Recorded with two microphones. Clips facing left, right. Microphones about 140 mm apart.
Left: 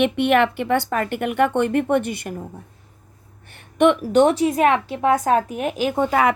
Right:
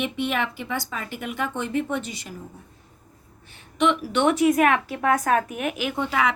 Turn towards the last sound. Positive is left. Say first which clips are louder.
# left 6 dB
turn(degrees=45)  # may be behind; listen again after turning